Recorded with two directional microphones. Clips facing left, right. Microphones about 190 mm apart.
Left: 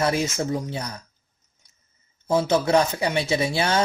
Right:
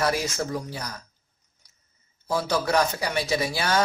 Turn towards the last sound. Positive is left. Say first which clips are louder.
# left 2 dB
turn(degrees=25)  # may be behind; listen again after turning